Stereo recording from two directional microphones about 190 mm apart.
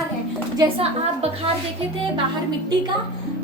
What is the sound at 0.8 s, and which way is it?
Speech, 30° right (ahead or behind).